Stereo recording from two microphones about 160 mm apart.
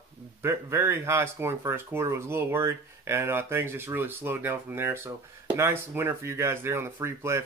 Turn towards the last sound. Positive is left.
turn(degrees=-15)  # may be behind; listen again after turning